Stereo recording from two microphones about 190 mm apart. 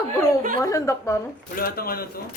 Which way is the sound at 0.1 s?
15° left (ahead or behind).